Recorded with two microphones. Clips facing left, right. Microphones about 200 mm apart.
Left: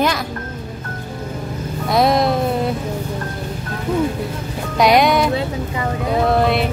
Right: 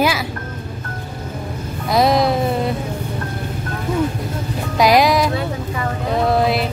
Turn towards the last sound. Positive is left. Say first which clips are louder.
# left 1 dB
turn(degrees=0)  # may be behind; listen again after turning